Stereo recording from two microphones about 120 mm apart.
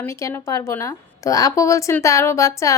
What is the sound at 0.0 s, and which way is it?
Speech, 25° left (ahead or behind).